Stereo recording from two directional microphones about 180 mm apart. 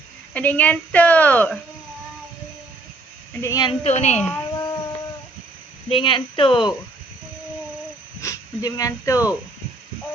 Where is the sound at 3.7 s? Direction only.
40° left (ahead or behind).